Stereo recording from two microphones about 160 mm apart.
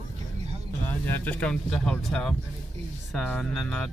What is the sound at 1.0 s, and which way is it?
Speech, 10° left (ahead or behind).